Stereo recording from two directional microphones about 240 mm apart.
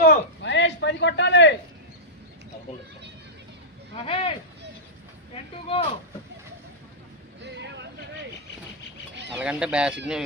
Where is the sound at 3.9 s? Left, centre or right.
Left.